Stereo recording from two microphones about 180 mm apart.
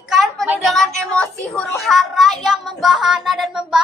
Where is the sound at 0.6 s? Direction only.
Centre (ahead or behind).